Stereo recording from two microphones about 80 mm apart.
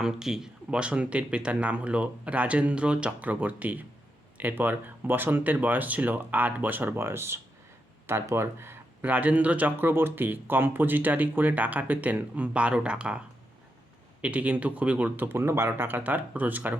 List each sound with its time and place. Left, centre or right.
0.0 s speech: centre; by 16.0 s right
16.0 s speech: centre